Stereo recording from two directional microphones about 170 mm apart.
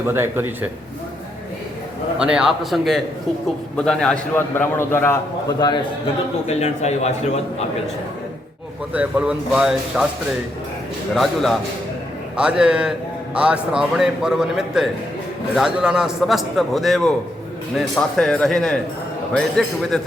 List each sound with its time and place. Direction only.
0.0 s a man's voice: 15° right (ahead or behind)
2.1 s a man's voice: 5° right (ahead or behind); by 5.8 s 25° left (ahead or behind)
6.5 s a man's voice: 40° left (ahead or behind)
8.9 s a man's voice: 5° right (ahead or behind)
11.1 s a man's voice: centre (ahead or behind)